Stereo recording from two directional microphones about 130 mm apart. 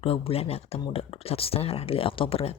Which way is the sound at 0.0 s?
45° left (ahead or behind).